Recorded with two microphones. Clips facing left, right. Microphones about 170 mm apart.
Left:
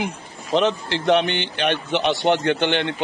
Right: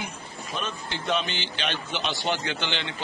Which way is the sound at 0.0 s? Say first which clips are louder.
Left 8 dB; 85° left.